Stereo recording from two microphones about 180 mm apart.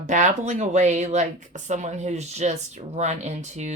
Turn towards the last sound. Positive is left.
turn(degrees=-40)  # may be behind; listen again after turning